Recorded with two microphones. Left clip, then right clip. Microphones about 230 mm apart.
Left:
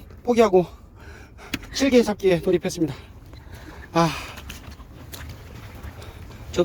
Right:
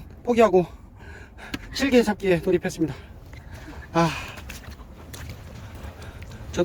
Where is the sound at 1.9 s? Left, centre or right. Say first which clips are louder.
Left 1 dB; centre.